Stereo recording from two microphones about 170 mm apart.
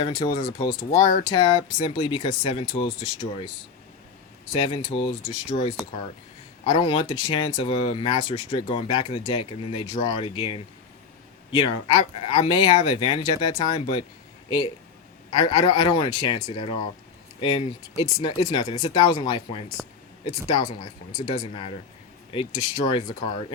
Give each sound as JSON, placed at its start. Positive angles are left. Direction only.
{"t": 0.0, "sound": "speech", "side_deg": 30}
{"t": 0.9, "sound": "speech", "side_deg": 50}
{"t": 1.2, "sound": "speech", "side_deg": 25}
{"t": 4.5, "sound": "speech", "side_deg": 30}
{"t": 6.7, "sound": "speech", "side_deg": 30}
{"t": 15.3, "sound": "speech", "side_deg": 25}